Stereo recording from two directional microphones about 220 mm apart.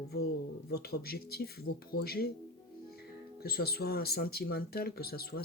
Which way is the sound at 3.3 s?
45° left (ahead or behind).